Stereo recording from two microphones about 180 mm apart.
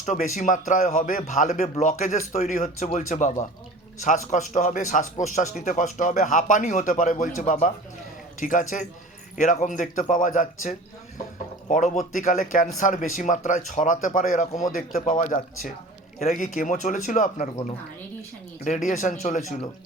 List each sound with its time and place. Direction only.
0.0 s speech: 45° left (ahead or behind)
12.1 s speech: 45° left (ahead or behind)
16.2 s speech: 45° left (ahead or behind)